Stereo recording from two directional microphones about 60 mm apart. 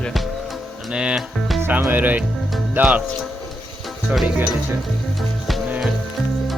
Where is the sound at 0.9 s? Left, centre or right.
Centre.